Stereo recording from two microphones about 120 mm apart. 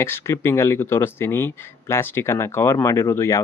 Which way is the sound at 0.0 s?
20° left (ahead or behind).